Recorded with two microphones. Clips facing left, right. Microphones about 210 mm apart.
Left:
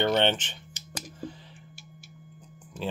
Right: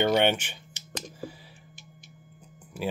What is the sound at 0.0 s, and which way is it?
Speech, 10° right (ahead or behind).